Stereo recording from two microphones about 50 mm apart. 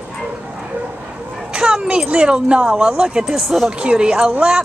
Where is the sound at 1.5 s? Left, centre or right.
Centre.